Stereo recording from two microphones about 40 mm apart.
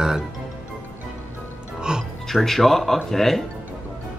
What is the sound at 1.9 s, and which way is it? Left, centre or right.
Speech, centre.